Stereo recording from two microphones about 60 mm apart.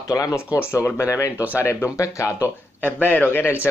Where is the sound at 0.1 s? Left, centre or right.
Left.